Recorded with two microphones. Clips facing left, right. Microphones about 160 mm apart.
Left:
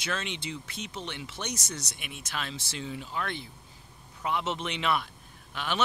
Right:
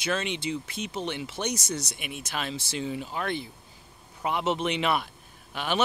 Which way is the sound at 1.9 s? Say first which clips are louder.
Right 4 dB; 10° right (ahead or behind).